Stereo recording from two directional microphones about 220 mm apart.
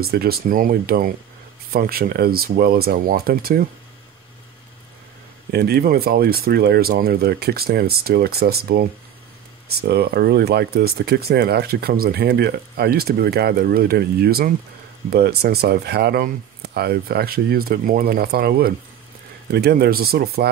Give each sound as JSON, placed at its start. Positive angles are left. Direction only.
{"t": 0.0, "sound": "speech", "side_deg": -45}
{"t": 5.5, "sound": "speech", "side_deg": -45}